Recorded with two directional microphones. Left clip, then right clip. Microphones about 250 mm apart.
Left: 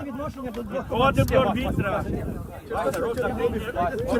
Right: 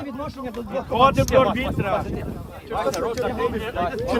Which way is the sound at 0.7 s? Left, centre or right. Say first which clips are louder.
Right 5 dB; right.